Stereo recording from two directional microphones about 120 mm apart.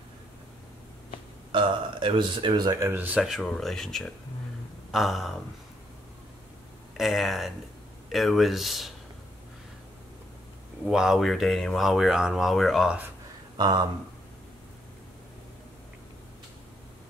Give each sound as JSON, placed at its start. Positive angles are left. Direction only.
{"t": 1.5, "sound": "speech", "side_deg": -45}
{"t": 2.9, "sound": "speech", "side_deg": -15}
{"t": 7.0, "sound": "speech", "side_deg": 0}
{"t": 10.9, "sound": "speech", "side_deg": -5}
{"t": 13.6, "sound": "speech", "side_deg": -35}